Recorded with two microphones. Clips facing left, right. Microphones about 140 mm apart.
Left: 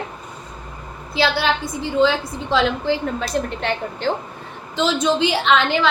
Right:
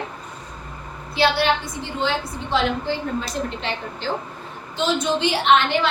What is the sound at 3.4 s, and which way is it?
Speech, 55° left (ahead or behind).